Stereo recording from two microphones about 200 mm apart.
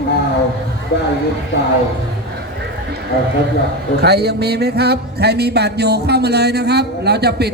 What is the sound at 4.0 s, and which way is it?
Music, 55° right (ahead or behind).